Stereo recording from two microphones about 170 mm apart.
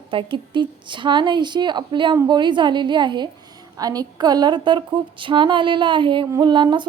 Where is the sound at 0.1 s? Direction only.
30° right (ahead or behind).